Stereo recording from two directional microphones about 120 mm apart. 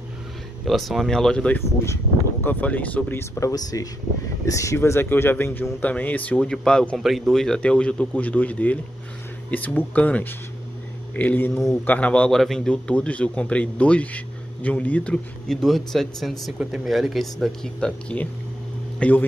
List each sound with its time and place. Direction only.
0.7 s a man's voice: centre (ahead or behind)